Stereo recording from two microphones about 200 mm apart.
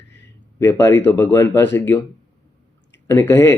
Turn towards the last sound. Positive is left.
turn(degrees=15)  # may be behind; listen again after turning